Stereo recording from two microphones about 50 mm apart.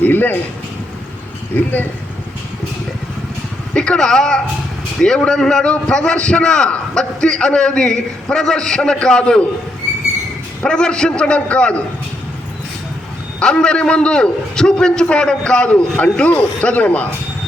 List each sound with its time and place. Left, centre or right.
0.0 s speech: left
1.5 s speech: left
3.8 s a man's voice: centre
10.6 s a man's voice: centre
13.4 s a man's voice: centre